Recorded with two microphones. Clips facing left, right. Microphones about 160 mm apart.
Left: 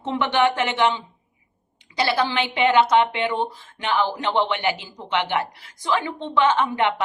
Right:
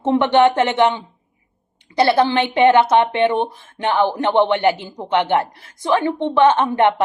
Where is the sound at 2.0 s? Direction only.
55° right (ahead or behind).